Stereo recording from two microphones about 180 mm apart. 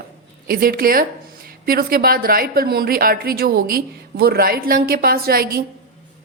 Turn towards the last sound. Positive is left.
turn(degrees=-55)  # may be behind; listen again after turning